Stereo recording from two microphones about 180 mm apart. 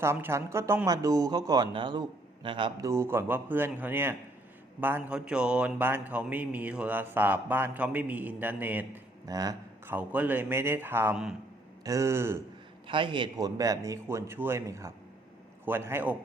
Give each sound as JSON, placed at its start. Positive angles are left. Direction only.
{"t": 0.0, "sound": "a man's voice", "side_deg": -15}
{"t": 2.9, "sound": "speech", "side_deg": -15}
{"t": 9.2, "sound": "speech", "side_deg": -20}
{"t": 9.9, "sound": "speech", "side_deg": -10}
{"t": 11.9, "sound": "speech", "side_deg": -15}
{"t": 12.9, "sound": "speech", "side_deg": -30}